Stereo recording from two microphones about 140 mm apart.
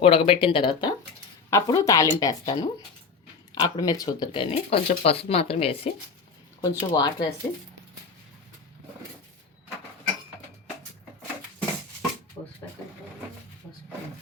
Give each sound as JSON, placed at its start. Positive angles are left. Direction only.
{"t": 0.0, "sound": "a woman's voice", "side_deg": 45}
{"t": 6.6, "sound": "a woman's voice", "side_deg": 25}